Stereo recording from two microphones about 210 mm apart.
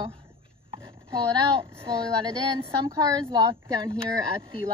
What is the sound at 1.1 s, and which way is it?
Speech, 20° right (ahead or behind).